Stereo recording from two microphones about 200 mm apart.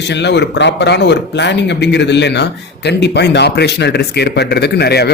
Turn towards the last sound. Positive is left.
turn(degrees=55)  # may be behind; listen again after turning